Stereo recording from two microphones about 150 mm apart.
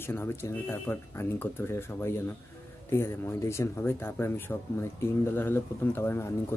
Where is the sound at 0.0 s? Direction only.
15° left (ahead or behind).